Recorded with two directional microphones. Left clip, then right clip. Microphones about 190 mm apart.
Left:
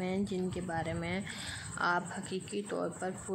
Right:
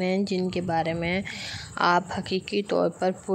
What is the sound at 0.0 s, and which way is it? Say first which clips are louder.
A woman's voice: right 9 dB; 40° right (ahead or behind).